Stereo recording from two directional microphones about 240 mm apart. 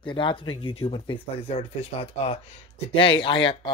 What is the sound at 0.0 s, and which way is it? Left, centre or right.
Speech, centre.